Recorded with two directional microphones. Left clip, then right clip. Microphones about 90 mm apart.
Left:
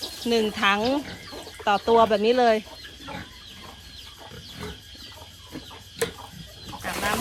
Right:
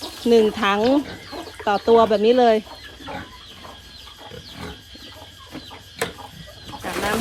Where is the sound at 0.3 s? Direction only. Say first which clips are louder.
Right 5 dB; 15° right (ahead or behind); by 2.6 s 5° left (ahead or behind).